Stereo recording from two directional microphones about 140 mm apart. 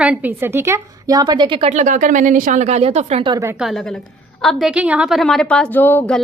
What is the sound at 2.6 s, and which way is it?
Speech, 50° right (ahead or behind).